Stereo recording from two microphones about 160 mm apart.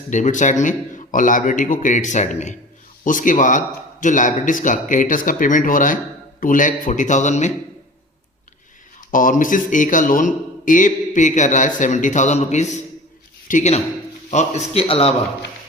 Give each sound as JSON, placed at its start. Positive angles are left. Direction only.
{"t": 0.1, "sound": "speech", "side_deg": 50}
{"t": 9.0, "sound": "a man's voice", "side_deg": 55}